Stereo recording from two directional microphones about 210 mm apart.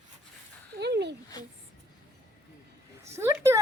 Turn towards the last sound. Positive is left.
turn(degrees=-15)  # may be behind; listen again after turning